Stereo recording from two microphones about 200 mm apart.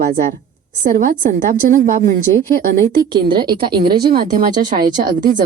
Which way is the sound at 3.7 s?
50° right (ahead or behind).